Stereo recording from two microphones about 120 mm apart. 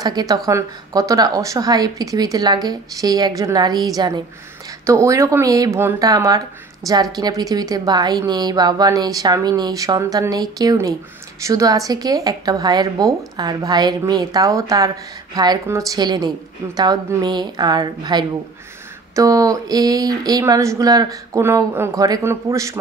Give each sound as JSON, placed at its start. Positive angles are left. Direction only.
{"t": 0.0, "sound": "speech", "side_deg": -30}